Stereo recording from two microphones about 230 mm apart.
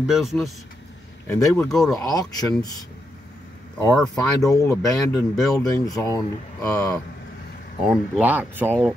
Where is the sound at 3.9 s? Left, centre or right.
Centre.